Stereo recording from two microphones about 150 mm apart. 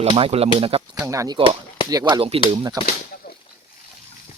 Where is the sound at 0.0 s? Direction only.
40° right (ahead or behind).